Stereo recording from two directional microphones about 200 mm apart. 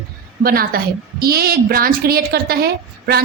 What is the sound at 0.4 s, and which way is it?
A woman's voice, 45° right (ahead or behind).